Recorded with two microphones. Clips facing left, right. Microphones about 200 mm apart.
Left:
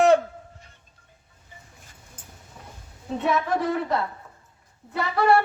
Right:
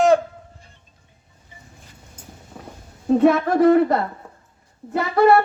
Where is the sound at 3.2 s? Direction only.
50° right (ahead or behind).